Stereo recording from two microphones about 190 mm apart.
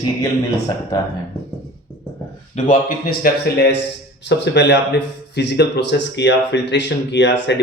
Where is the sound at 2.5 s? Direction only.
35° left (ahead or behind).